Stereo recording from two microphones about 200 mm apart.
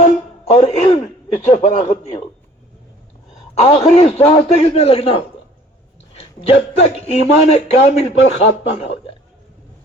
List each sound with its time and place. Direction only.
0.5 s a man's voice: 35° left (ahead or behind)
3.5 s a man's voice: 30° left (ahead or behind)